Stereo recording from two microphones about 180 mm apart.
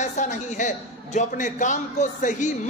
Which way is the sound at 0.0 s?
40° left (ahead or behind).